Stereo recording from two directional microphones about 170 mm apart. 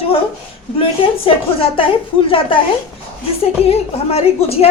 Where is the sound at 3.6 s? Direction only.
35° left (ahead or behind).